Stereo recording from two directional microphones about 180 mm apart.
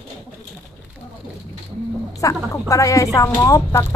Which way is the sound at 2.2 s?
20° left (ahead or behind).